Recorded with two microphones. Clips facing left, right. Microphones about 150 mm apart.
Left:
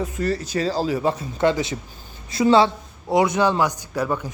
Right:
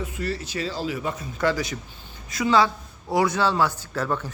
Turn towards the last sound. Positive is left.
turn(degrees=15)  # may be behind; listen again after turning